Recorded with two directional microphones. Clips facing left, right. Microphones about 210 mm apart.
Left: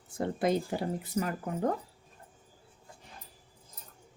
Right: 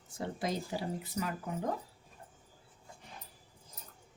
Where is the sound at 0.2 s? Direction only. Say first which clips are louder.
Left 7 dB; 55° left (ahead or behind).